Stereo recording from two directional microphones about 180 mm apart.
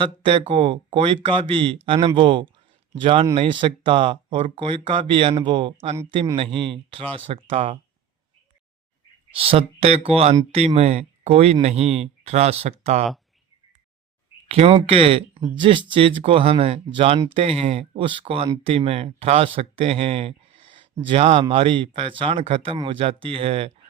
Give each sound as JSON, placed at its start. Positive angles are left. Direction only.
{"t": 0.0, "sound": "speech", "side_deg": -30}
{"t": 9.3, "sound": "speech", "side_deg": -30}
{"t": 14.4, "sound": "speech", "side_deg": -30}